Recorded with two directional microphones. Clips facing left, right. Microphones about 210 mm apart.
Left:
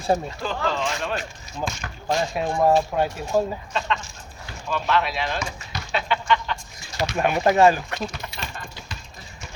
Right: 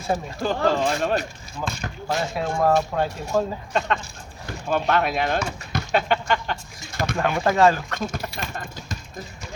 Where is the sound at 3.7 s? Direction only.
50° right (ahead or behind).